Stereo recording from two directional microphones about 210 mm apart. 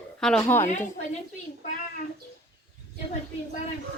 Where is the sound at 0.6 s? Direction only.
35° left (ahead or behind).